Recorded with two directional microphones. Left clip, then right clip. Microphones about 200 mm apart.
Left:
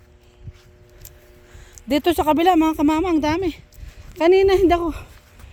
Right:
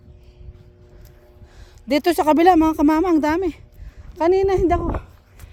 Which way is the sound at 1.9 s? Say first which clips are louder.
Right 1 dB; 25° right (ahead or behind).